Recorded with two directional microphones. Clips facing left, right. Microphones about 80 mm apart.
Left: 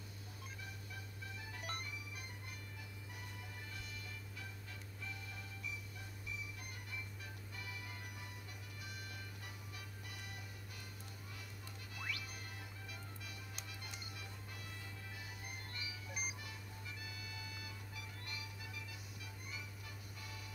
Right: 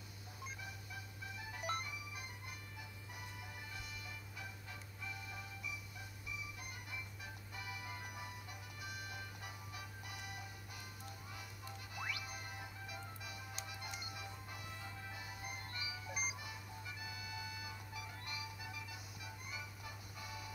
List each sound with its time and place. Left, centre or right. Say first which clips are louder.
0.6 s music: right 1 dB; centre
5.0 s music: right 2 dB; centre
7.5 s music: right 4 dB; centre
11.9 s music: right 2 dB; centre